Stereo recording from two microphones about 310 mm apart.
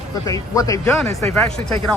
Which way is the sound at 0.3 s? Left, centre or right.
Centre.